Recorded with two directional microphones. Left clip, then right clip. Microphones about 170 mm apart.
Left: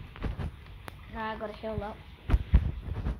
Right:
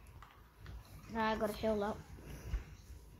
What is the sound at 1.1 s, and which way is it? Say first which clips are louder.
Speech: even; 90° right.